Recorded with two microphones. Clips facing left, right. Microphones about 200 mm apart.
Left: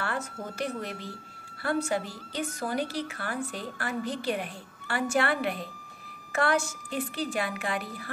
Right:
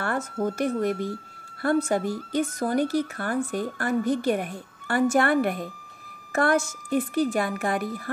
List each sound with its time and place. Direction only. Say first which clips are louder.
0.0 s speech: right 7 dB; 50° right (ahead or behind)